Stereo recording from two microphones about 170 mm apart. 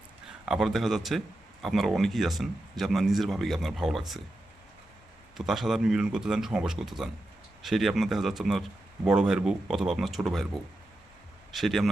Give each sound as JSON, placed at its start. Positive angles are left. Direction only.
{"t": 0.4, "sound": "speech", "side_deg": 0}
{"t": 5.4, "sound": "speech", "side_deg": 0}
{"t": 11.5, "sound": "speech", "side_deg": 0}